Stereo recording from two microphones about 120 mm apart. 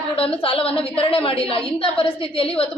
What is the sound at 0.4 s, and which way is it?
A woman's voice, 50° left (ahead or behind).